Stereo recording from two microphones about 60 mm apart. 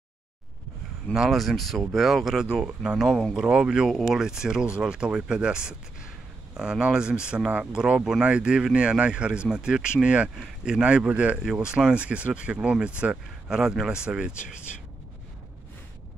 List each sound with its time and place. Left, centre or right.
1.1 s speech: centre
2.5 s speech: centre
3.1 s speech: centre
3.3 s speech: centre
13.5 s a man's voice: centre